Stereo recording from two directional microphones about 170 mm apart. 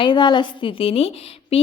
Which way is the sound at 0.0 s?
30° left (ahead or behind).